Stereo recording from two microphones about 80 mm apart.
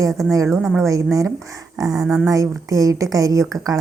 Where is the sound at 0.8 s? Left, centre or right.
Right.